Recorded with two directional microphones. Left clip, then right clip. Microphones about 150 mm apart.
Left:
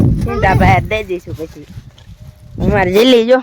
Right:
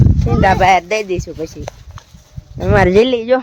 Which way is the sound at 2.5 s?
25° right (ahead or behind).